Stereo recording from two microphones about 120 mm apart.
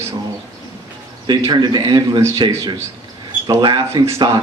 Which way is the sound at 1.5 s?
35° right (ahead or behind).